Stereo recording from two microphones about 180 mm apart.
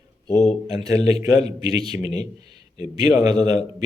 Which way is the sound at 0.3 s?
35° left (ahead or behind).